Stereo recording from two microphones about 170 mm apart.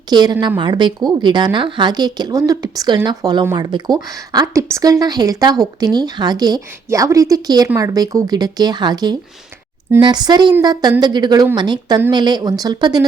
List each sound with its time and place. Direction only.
0.1 s a woman's voice: 25° right (ahead or behind)